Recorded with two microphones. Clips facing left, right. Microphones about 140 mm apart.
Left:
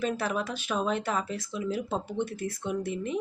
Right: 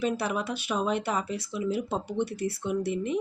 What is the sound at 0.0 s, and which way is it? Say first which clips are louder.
Speech: right 1 dB; 10° right (ahead or behind).